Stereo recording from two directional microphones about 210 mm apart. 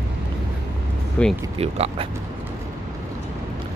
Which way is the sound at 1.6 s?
30° right (ahead or behind).